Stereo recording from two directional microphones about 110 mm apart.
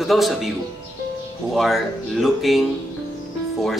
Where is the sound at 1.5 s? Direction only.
Centre (ahead or behind).